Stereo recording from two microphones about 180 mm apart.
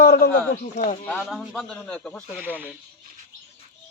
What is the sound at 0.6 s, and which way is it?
Speech, 35° left (ahead or behind).